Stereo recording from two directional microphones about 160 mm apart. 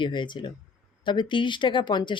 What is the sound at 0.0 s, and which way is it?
Speech, 30° left (ahead or behind).